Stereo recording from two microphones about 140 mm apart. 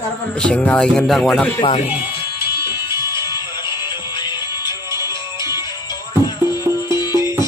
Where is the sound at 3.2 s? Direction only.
30° left (ahead or behind).